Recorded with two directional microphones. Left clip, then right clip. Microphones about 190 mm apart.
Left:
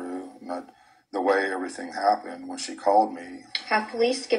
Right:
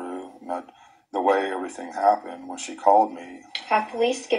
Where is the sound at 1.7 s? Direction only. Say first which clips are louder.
Right 6 dB; 20° right (ahead or behind).